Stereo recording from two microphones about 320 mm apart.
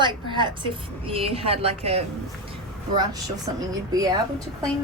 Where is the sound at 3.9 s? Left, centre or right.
Centre.